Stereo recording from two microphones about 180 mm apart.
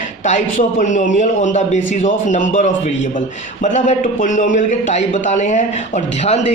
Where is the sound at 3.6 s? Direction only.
40° left (ahead or behind).